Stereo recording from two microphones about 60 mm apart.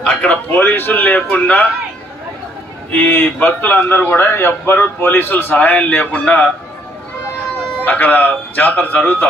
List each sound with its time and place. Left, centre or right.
0.0 s a man's voice: centre
0.5 s a man's voice: left
2.9 s a man's voice: left
7.8 s speech: left